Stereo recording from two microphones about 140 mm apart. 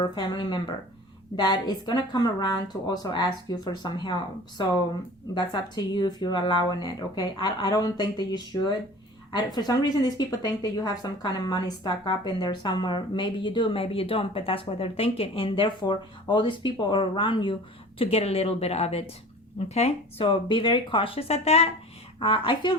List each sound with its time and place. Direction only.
0.0 s a woman's voice: 30° left (ahead or behind)
5.3 s a woman's voice: 30° left (ahead or behind)